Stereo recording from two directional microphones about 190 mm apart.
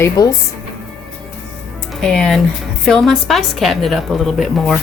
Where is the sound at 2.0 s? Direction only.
5° left (ahead or behind).